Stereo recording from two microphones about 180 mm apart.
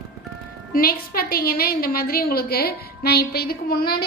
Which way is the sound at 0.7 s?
55° left (ahead or behind).